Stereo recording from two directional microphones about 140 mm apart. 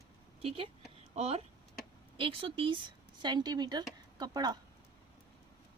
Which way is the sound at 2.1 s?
40° right (ahead or behind).